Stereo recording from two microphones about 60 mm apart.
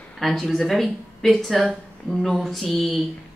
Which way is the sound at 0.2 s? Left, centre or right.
Centre.